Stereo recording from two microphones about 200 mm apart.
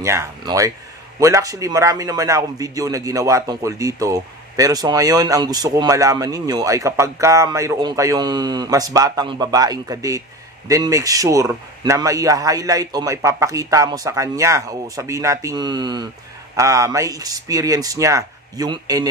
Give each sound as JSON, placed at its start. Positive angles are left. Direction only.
{"t": 0.0, "sound": "a man's voice", "side_deg": -15}